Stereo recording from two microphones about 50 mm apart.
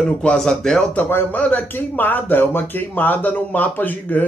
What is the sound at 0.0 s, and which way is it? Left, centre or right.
Speech, left.